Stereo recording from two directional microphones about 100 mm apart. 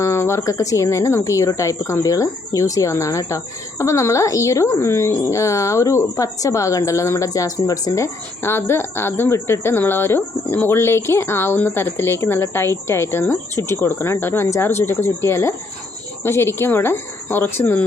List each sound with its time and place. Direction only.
0.0 s speech: 30° left (ahead or behind)